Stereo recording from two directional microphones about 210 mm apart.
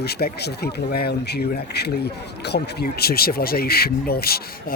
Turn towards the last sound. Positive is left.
turn(degrees=45)  # may be behind; listen again after turning